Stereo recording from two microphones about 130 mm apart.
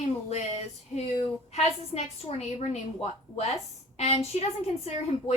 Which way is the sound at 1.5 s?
55° left (ahead or behind).